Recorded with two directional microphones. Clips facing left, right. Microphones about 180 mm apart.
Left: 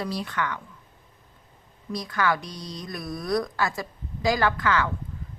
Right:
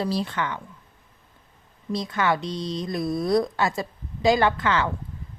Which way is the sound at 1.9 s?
25° right (ahead or behind).